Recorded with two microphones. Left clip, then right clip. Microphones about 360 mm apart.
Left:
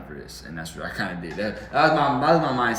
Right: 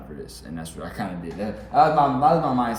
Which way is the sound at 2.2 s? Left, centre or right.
Right.